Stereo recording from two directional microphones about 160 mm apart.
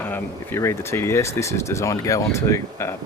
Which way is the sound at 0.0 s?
15° left (ahead or behind).